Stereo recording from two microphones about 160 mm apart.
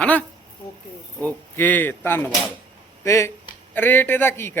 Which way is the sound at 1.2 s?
10° left (ahead or behind).